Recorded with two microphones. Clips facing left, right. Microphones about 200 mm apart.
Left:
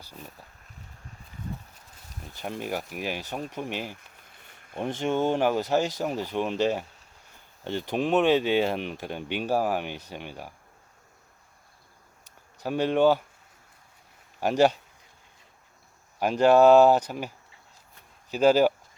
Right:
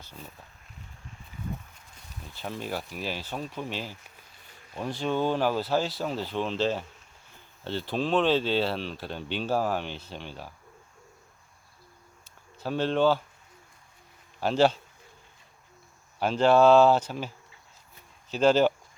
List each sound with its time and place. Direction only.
0.0 s speech: 10° left (ahead or behind)
2.3 s speech: 15° left (ahead or behind)
4.4 s a sound: 55° left (ahead or behind)
4.8 s speech: 20° left (ahead or behind)
12.5 s speech: 15° left (ahead or behind)
14.4 s speech: 15° left (ahead or behind)
16.2 s speech: 10° left (ahead or behind)